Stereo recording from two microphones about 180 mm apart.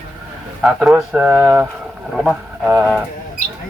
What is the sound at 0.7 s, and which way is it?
A man's voice, 5° right (ahead or behind).